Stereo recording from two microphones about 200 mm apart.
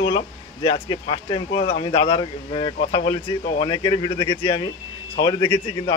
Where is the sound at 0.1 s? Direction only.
25° left (ahead or behind).